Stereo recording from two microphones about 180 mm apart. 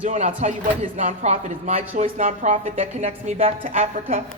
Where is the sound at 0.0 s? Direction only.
45° right (ahead or behind).